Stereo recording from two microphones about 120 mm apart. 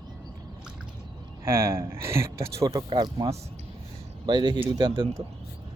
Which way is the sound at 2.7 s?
40° right (ahead or behind).